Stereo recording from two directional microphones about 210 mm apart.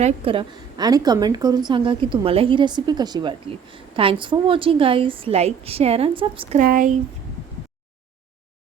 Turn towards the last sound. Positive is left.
turn(degrees=-40)  # may be behind; listen again after turning